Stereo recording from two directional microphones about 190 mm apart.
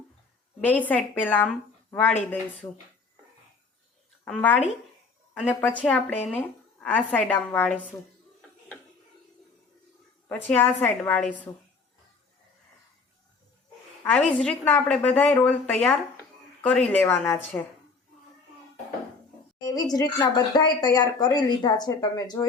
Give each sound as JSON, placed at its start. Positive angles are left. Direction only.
{"t": 0.6, "sound": "a woman's voice", "side_deg": 10}
{"t": 4.3, "sound": "a woman's voice", "side_deg": 10}
{"t": 10.2, "sound": "a woman's voice", "side_deg": 10}
{"t": 14.2, "sound": "a woman's voice", "side_deg": 5}
{"t": 19.6, "sound": "speech", "side_deg": 20}